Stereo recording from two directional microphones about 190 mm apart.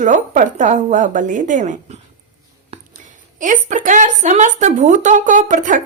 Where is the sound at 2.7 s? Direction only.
35° right (ahead or behind).